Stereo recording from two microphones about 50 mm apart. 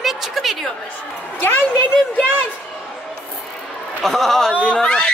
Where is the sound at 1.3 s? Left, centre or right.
Left.